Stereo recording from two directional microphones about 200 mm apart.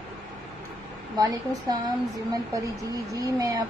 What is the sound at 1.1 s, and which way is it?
A woman's voice, 20° right (ahead or behind).